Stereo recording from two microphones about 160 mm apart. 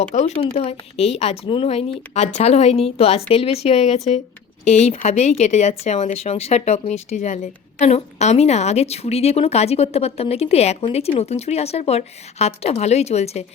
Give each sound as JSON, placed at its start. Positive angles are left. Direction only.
{"t": 0.1, "sound": "speech", "side_deg": 45}